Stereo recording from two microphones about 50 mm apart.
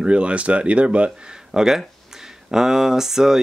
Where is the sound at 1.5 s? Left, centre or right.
Centre.